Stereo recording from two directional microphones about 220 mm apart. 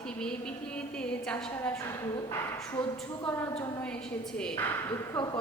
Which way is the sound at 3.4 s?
5° left (ahead or behind).